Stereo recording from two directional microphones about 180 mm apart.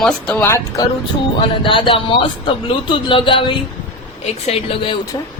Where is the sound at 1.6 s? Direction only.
30° left (ahead or behind).